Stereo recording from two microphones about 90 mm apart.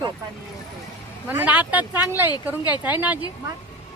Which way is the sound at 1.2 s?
15° right (ahead or behind).